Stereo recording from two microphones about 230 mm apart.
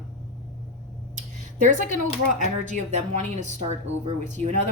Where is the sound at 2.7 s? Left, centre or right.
Right.